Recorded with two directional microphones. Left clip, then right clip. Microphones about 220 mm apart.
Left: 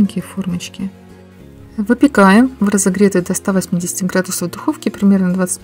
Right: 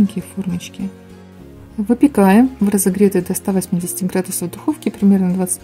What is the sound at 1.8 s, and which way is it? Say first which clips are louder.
Speech: left 3 dB; 15° left (ahead or behind).